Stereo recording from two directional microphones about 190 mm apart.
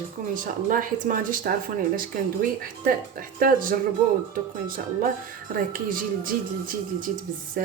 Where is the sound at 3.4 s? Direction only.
45° right (ahead or behind).